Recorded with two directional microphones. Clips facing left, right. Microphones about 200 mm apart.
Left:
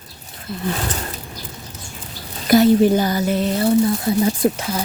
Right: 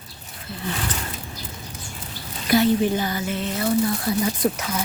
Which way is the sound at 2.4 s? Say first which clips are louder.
Left 6 dB; 40° left (ahead or behind).